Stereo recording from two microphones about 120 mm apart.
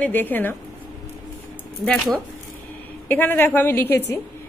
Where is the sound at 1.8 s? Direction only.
10° left (ahead or behind).